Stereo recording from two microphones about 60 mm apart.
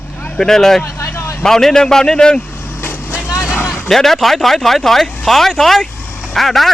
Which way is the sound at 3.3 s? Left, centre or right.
Left.